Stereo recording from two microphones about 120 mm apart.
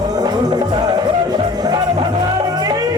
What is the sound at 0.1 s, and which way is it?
Music, 35° right (ahead or behind).